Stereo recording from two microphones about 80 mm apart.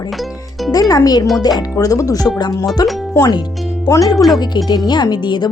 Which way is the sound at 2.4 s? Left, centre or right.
Left.